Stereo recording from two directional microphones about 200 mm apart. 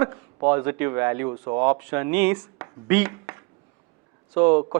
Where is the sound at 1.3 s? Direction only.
25° right (ahead or behind).